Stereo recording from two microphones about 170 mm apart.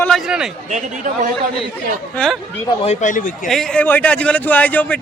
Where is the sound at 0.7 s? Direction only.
50° right (ahead or behind).